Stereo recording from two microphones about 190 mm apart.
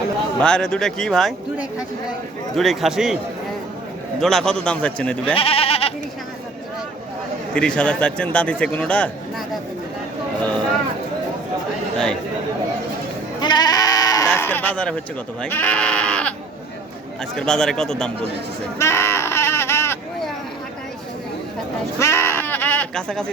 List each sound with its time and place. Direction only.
0.3 s a man's voice: 5° left (ahead or behind)
4.2 s a man's voice: centre (ahead or behind)
5.3 s goat: 30° left (ahead or behind)
7.5 s a man's voice: 5° left (ahead or behind)
13.4 s bleat: 20° left (ahead or behind)
14.3 s sheep: 10° left (ahead or behind)
15.4 s speech: 10° left (ahead or behind)
17.3 s a man's voice: 5° left (ahead or behind)
18.8 s a sound: 15° left (ahead or behind)
21.9 s sheep: 15° left (ahead or behind)